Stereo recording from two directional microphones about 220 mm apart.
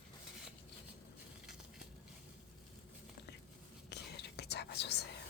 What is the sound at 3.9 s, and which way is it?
Whispering, 50° left (ahead or behind).